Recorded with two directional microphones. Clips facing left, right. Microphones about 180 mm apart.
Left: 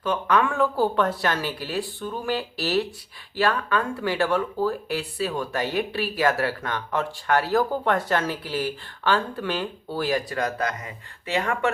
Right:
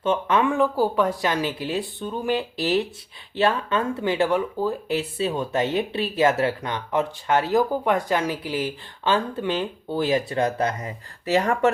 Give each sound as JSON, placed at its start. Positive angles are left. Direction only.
{"t": 0.0, "sound": "speech", "side_deg": -25}